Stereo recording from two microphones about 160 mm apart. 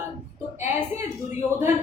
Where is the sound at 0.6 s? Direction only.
15° right (ahead or behind).